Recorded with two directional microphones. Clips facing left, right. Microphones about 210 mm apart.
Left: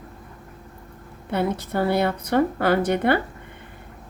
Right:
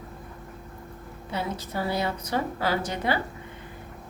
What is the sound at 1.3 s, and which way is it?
A woman's voice, 60° left (ahead or behind).